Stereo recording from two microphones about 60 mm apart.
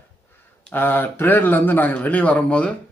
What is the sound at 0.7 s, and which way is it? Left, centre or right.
A man's voice, left.